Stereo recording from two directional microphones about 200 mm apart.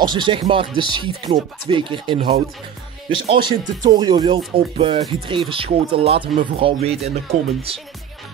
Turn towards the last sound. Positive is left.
turn(degrees=-30)  # may be behind; listen again after turning